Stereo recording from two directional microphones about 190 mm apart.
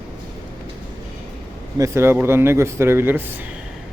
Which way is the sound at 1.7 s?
15° right (ahead or behind).